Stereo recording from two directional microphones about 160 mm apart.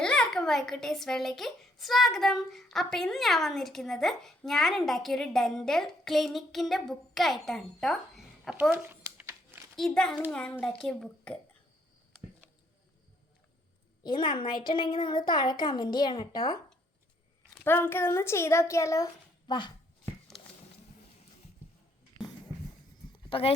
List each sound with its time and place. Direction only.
0.0 s a child's voice: 5° left (ahead or behind); by 9.6 s 15° right (ahead or behind)
9.7 s a child's voice: 5° left (ahead or behind)
14.0 s a child's voice: 30° left (ahead or behind)
17.6 s speech: 15° left (ahead or behind); by 19.7 s 30° left (ahead or behind)
23.3 s speech: 40° left (ahead or behind)